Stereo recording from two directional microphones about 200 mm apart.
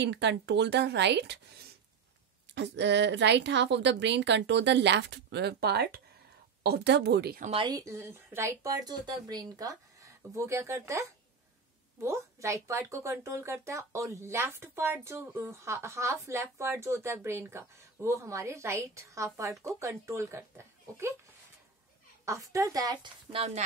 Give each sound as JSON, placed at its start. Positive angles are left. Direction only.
{"t": 0.0, "sound": "a woman's voice", "side_deg": -60}
{"t": 2.5, "sound": "a woman's voice", "side_deg": -60}
{"t": 7.6, "sound": "a woman's voice", "side_deg": -15}
{"t": 22.2, "sound": "a woman's voice", "side_deg": -15}